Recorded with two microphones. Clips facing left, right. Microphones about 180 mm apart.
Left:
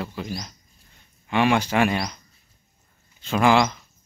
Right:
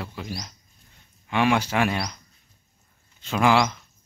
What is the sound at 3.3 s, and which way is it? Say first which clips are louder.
Speech: left 2 dB; centre (ahead or behind).